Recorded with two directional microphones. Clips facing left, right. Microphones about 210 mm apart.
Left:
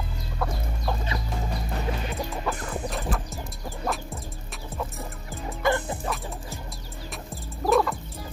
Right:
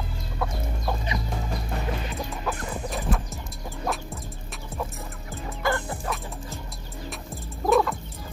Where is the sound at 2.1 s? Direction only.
Centre (ahead or behind).